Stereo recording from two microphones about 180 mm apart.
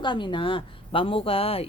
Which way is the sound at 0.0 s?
25° left (ahead or behind).